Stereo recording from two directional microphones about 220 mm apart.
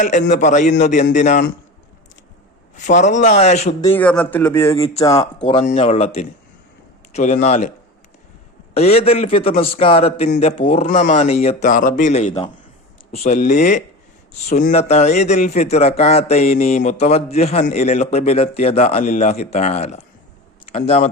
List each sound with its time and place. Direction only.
0.0 s speech: 35° left (ahead or behind)
2.7 s speech: 35° left (ahead or behind)
3.9 s a man's voice: 5° left (ahead or behind)
5.4 s a man's voice: 30° left (ahead or behind)
8.7 s speech: 30° left (ahead or behind)